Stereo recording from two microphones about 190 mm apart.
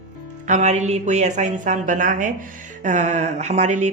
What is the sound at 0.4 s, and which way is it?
A man's voice, 40° right (ahead or behind).